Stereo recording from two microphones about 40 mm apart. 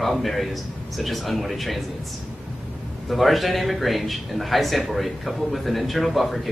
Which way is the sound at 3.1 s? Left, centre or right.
Centre.